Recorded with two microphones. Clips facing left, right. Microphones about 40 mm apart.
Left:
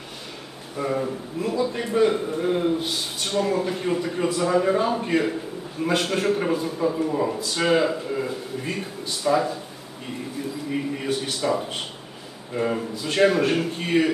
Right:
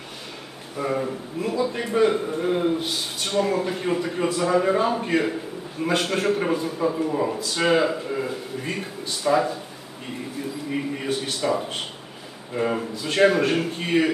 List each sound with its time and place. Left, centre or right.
0.8 s a man's voice: centre